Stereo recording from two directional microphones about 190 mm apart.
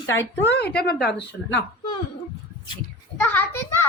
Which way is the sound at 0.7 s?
55° left (ahead or behind).